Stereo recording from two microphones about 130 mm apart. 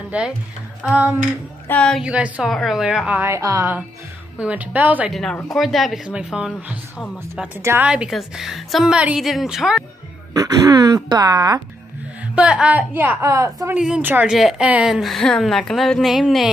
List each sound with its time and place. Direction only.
0.1 s a woman's voice: 10° right (ahead or behind)
1.7 s speech: 10° left (ahead or behind)
2.0 s a woman's voice: 10° right (ahead or behind); by 3.7 s 25° right (ahead or behind)
4.4 s a woman's voice: 10° right (ahead or behind)
5.1 s a woman's voice: 5° left (ahead or behind)
7.6 s a woman's voice: 20° right (ahead or behind)
7.9 s a woman's voice: 5° right (ahead or behind)
10.3 s speech: 25° right (ahead or behind)
12.4 s a woman's voice: 10° right (ahead or behind); by 13.7 s 25° right (ahead or behind)
13.7 s a woman's voice: 5° right (ahead or behind)